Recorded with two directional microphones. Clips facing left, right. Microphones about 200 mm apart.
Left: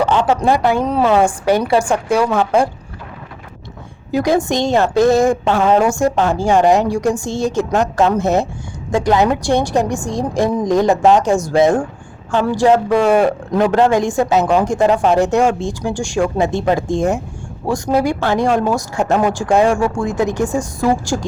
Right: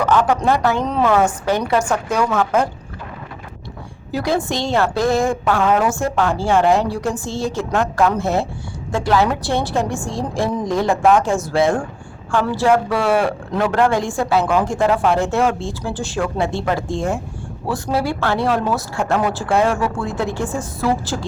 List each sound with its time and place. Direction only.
0.0 s a sound: 25° left (ahead or behind)
0.4 s speech: 15° left (ahead or behind)
4.1 s a man's voice: 15° left (ahead or behind)